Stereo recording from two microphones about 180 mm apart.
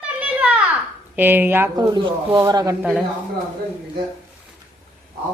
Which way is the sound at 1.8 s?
25° right (ahead or behind).